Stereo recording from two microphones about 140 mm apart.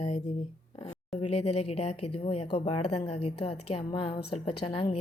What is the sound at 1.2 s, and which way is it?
Speech, 45° left (ahead or behind).